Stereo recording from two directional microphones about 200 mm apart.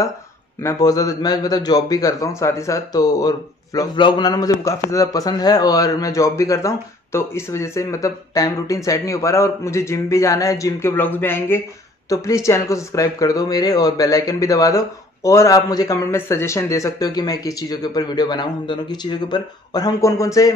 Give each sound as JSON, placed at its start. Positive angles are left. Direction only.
{"t": 0.6, "sound": "a man's voice", "side_deg": 15}